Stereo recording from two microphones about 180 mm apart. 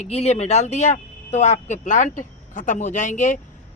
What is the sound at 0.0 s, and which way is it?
Speech, 35° left (ahead or behind).